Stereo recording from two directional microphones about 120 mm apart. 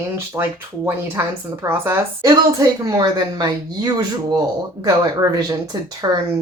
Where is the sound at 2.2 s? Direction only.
35° right (ahead or behind).